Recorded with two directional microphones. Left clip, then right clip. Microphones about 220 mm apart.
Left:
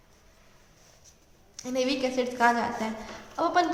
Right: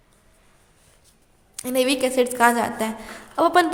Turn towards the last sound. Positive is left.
turn(degrees=-50)  # may be behind; listen again after turning